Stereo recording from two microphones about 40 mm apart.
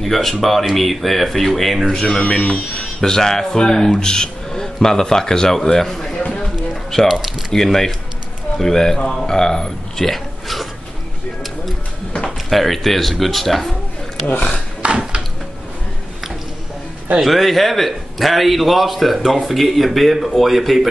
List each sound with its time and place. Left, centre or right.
0.0 s a man's voice: centre
2.0 s speech: left
2.8 s a man's voice: centre
6.7 s music: centre
7.1 s a man's voice: centre
7.5 s a man's voice: centre
12.4 s a man's voice: centre
14.8 s a sound: right
17.2 s a man's voice: centre